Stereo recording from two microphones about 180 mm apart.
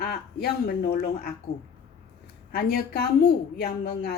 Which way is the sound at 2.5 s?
60° left (ahead or behind).